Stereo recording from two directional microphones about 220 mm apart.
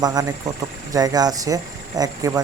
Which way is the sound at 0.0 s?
15° right (ahead or behind).